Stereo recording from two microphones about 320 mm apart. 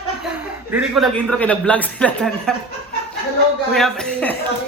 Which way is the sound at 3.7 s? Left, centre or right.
Centre.